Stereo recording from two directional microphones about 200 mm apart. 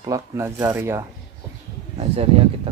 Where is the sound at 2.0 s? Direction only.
30° right (ahead or behind).